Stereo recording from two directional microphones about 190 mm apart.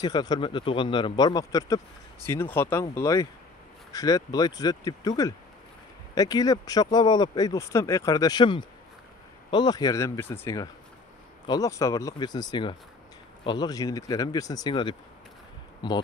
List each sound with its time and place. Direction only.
0.0 s speech: 20° left (ahead or behind)